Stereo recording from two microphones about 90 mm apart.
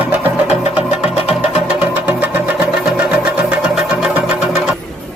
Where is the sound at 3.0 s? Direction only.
15° right (ahead or behind).